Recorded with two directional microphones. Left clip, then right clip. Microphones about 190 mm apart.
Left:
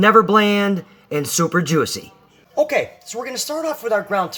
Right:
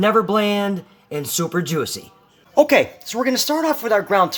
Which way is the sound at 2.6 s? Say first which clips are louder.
Right 4 dB; 45° right (ahead or behind).